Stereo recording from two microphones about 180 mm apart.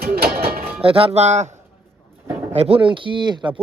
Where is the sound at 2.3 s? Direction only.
15° right (ahead or behind).